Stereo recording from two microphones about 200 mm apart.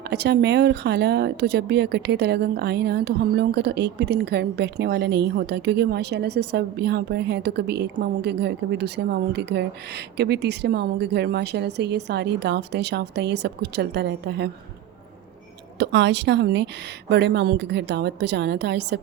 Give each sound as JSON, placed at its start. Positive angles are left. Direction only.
{"t": 0.0, "sound": "speech", "side_deg": -55}
{"t": 15.8, "sound": "speech", "side_deg": -60}